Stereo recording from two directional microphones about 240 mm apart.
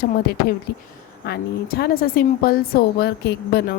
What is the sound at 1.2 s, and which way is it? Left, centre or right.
A woman's voice, left.